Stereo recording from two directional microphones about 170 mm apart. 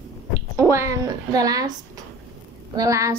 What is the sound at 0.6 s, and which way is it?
A woman's voice, 15° right (ahead or behind).